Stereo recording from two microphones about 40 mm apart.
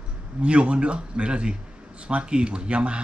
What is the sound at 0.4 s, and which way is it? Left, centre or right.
Speech, right.